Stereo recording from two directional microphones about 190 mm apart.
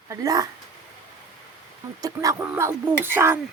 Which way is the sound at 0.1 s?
20° right (ahead or behind).